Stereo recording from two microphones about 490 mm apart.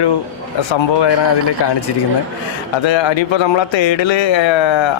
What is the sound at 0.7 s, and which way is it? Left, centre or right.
Speech, left.